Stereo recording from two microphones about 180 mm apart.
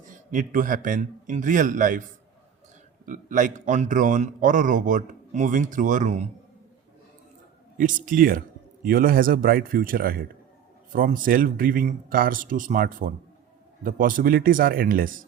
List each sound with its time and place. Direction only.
0.0 s a man's voice: 45° right (ahead or behind)
3.1 s speech: 45° right (ahead or behind)
7.8 s speech: 45° right (ahead or behind)